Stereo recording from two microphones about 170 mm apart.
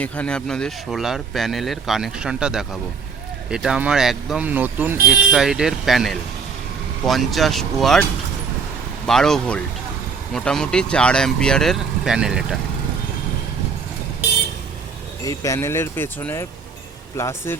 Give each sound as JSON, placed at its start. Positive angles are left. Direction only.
{"t": 0.0, "sound": "speech", "side_deg": 5}
{"t": 9.0, "sound": "speech", "side_deg": 5}
{"t": 15.2, "sound": "speech", "side_deg": 20}